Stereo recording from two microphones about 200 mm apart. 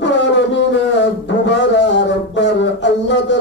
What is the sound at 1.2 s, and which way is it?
Music, 60° left (ahead or behind).